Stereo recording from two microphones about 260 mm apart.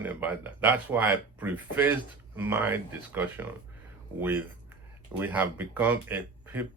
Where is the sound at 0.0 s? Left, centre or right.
Centre.